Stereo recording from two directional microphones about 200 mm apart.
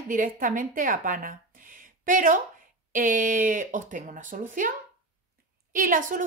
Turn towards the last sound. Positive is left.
turn(degrees=-40)  # may be behind; listen again after turning